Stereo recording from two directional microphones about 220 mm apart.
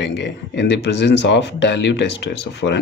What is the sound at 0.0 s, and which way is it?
Speech, 50° left (ahead or behind).